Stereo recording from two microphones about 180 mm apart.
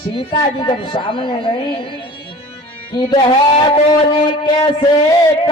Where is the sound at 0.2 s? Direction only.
30° left (ahead or behind).